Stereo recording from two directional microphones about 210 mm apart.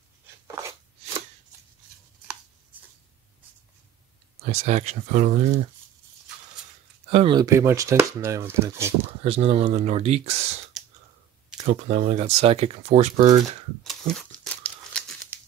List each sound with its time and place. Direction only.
4.5 s speech: 35° right (ahead or behind)
7.1 s speech: 25° right (ahead or behind)
9.2 s speech: 30° right (ahead or behind)
13.8 s crumpling: centre (ahead or behind)